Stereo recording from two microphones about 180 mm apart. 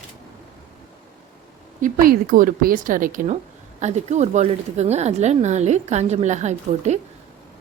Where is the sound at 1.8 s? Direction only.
50° right (ahead or behind).